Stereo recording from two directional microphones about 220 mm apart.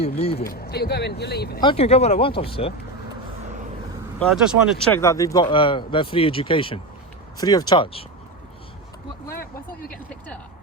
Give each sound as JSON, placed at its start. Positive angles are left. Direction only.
{"t": 0.0, "sound": "speech", "side_deg": 30}
{"t": 0.4, "sound": "speech", "side_deg": 45}
{"t": 1.6, "sound": "speech", "side_deg": 25}
{"t": 4.2, "sound": "speech", "side_deg": 0}
{"t": 4.9, "sound": "speech", "side_deg": 10}
{"t": 9.3, "sound": "speech", "side_deg": 40}
{"t": 9.9, "sound": "speech", "side_deg": 5}